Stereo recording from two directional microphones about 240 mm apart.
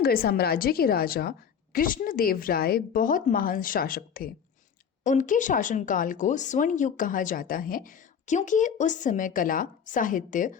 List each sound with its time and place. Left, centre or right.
0.0 s speech: left